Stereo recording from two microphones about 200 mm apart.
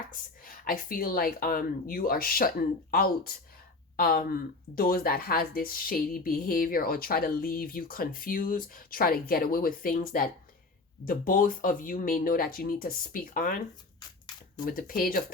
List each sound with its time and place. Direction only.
0.1 s speech: 45° left (ahead or behind)
14.6 s speech: 45° left (ahead or behind)